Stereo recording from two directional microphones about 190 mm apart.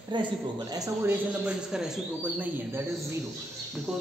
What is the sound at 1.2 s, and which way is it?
A man's voice, 5° right (ahead or behind).